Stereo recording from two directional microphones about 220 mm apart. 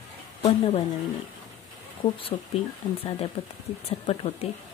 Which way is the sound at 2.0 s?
25° left (ahead or behind).